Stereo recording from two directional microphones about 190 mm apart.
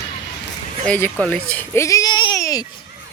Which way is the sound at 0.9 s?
10° left (ahead or behind).